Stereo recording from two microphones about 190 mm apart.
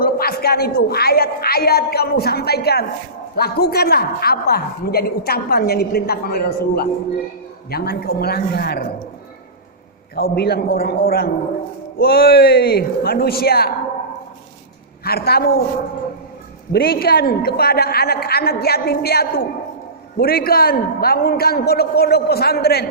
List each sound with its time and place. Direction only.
0.0 s a woman's voice: 55° left (ahead or behind)
10.2 s a man's voice: 55° left (ahead or behind)
15.0 s a woman's voice: 55° left (ahead or behind)
16.7 s a woman's voice: 50° left (ahead or behind)